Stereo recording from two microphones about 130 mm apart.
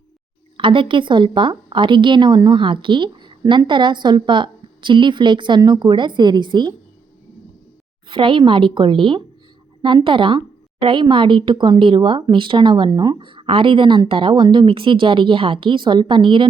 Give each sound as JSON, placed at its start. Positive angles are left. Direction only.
{"t": 0.5, "sound": "a woman's voice", "side_deg": -40}
{"t": 8.0, "sound": "a woman's voice", "side_deg": -40}